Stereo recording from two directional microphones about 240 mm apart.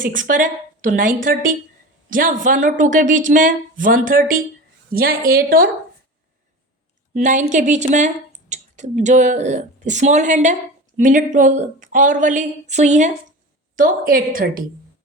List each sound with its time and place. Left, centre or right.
0.0 s speech: right
7.1 s speech: right